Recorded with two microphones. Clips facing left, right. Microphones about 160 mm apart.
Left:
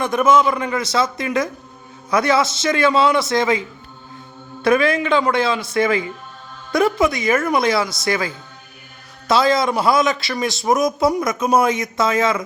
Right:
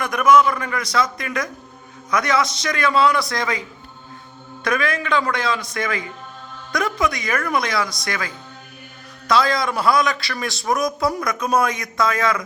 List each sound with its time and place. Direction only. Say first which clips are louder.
0.0 s a man's voice: even; 25° left (ahead or behind)
4.6 s a man's voice: left 6 dB; 30° left (ahead or behind)